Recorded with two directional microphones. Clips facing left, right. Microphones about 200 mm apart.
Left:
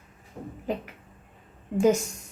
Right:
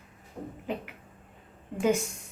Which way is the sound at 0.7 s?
40° left (ahead or behind).